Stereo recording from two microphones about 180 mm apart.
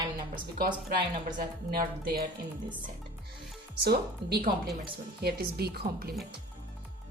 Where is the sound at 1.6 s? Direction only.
55° right (ahead or behind).